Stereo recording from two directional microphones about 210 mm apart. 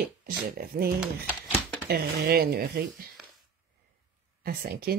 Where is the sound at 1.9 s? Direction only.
45° right (ahead or behind).